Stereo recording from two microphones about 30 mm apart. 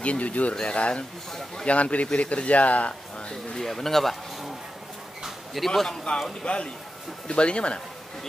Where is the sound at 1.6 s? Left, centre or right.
Left.